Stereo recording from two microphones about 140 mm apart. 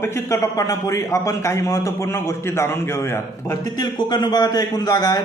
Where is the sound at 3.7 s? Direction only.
30° left (ahead or behind).